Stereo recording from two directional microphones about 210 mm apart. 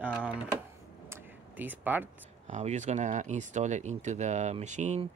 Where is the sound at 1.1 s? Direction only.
10° right (ahead or behind).